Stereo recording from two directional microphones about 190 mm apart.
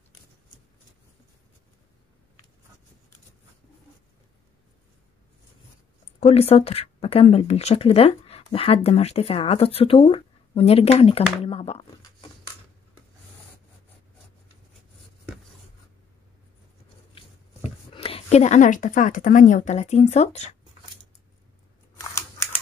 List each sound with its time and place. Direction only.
6.1 s speech: 30° left (ahead or behind)
17.6 s speech: 30° left (ahead or behind)
22.1 s computer keyboard: 15° left (ahead or behind)